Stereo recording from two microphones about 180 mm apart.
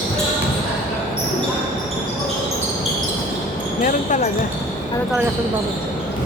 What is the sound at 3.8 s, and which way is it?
Basketball bounce, 45° left (ahead or behind).